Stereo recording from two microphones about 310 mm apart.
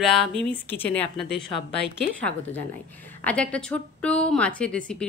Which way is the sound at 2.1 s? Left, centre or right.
Centre.